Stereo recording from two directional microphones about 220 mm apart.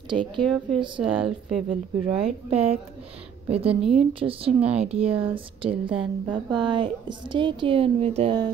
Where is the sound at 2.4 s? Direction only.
30° right (ahead or behind).